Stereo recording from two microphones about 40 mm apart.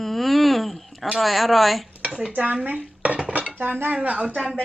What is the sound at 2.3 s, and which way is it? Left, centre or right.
Dishes, right.